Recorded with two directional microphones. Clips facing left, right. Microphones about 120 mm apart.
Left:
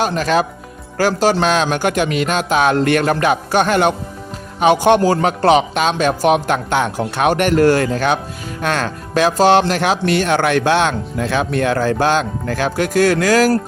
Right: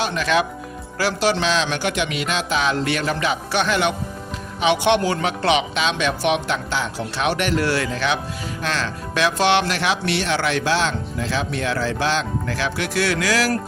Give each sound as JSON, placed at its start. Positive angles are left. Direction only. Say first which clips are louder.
{"t": 0.0, "sound": "a man's voice", "louder": "left 4 dB", "side_deg": 40}